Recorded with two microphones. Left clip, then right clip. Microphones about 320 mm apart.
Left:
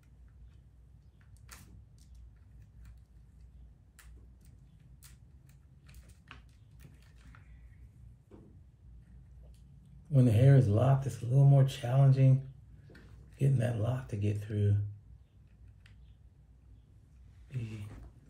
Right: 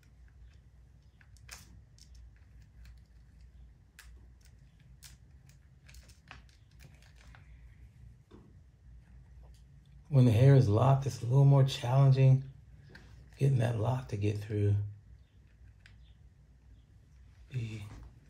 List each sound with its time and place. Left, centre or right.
10.1 s speech: right
13.4 s speech: right